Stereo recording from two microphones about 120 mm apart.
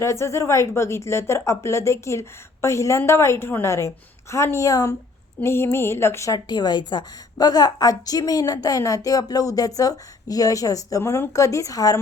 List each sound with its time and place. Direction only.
0.0 s a woman's voice: 25° left (ahead or behind)